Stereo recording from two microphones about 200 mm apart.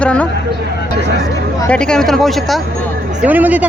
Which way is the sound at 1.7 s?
5° left (ahead or behind).